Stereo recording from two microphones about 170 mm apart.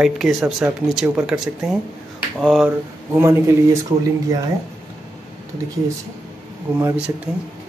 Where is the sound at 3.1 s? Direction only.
15° right (ahead or behind).